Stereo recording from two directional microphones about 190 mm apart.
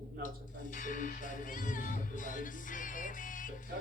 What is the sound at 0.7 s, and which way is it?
Music, 45° left (ahead or behind).